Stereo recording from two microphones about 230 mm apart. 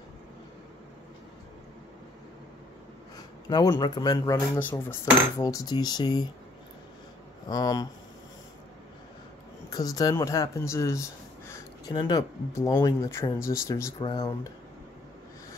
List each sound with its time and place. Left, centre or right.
3.4 s speech: centre
7.4 s speech: centre
9.7 s speech: centre